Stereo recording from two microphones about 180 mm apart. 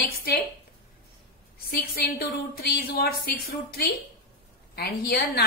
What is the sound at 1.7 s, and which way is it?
A woman's voice, 60° left (ahead or behind).